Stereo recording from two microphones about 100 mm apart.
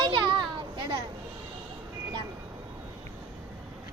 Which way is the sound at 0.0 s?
45° right (ahead or behind).